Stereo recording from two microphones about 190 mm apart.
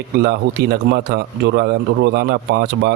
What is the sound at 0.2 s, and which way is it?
A man's voice, 55° right (ahead or behind).